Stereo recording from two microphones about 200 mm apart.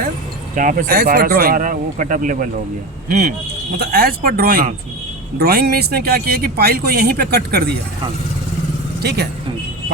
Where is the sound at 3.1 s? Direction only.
50° right (ahead or behind).